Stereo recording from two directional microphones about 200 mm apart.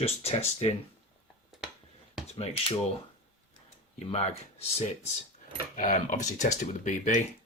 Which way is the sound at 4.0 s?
30° left (ahead or behind).